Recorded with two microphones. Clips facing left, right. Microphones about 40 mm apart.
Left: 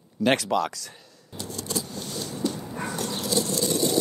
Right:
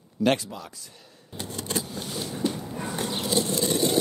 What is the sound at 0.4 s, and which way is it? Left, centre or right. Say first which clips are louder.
Speech: left 14 dB; left.